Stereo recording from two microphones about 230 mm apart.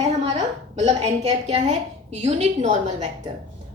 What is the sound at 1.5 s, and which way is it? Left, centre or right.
A woman's voice, right.